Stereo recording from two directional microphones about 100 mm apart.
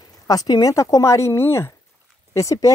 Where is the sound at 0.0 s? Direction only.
40° left (ahead or behind).